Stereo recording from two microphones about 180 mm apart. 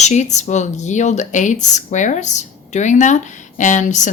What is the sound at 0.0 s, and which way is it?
Speech, 40° left (ahead or behind).